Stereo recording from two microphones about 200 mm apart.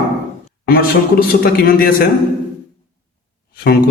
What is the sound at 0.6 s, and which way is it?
A man's voice, 50° left (ahead or behind).